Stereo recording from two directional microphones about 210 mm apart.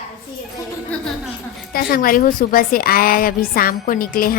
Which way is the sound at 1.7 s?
45° left (ahead or behind).